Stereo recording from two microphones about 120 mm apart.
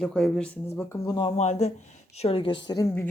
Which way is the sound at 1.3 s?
70° left (ahead or behind).